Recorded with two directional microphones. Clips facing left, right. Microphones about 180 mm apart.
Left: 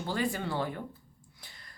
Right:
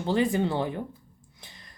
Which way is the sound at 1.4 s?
20° right (ahead or behind).